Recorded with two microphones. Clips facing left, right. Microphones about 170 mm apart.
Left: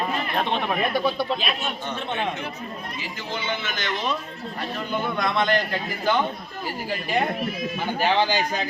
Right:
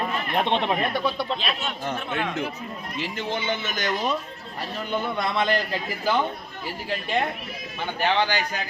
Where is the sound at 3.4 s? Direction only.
20° right (ahead or behind).